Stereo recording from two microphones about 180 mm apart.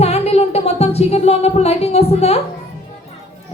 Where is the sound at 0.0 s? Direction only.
35° left (ahead or behind).